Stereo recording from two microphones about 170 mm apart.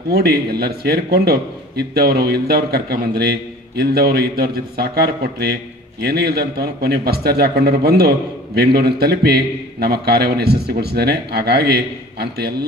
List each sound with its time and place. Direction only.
0.1 s a man's voice: 70° right (ahead or behind)